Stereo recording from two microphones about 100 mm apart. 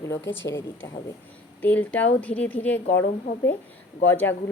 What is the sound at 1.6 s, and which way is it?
A woman's voice, 15° left (ahead or behind).